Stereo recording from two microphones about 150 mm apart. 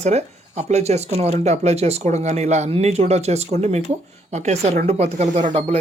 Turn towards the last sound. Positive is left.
turn(degrees=-40)  # may be behind; listen again after turning